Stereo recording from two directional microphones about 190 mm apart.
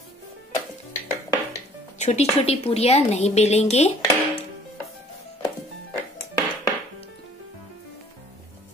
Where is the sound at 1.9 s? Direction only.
35° left (ahead or behind).